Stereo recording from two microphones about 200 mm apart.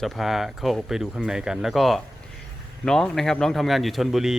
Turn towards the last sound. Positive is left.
turn(degrees=0)  # may be behind; listen again after turning